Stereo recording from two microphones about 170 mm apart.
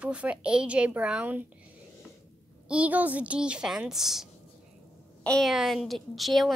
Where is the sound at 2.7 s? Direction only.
10° right (ahead or behind).